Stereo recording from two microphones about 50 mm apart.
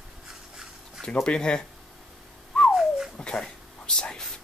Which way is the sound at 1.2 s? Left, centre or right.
Centre.